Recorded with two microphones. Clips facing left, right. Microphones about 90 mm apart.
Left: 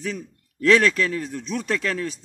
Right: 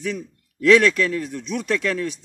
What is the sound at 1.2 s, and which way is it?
Speech, 35° left (ahead or behind).